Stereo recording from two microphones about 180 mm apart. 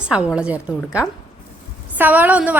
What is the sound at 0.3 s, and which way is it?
A woman's voice, 5° right (ahead or behind).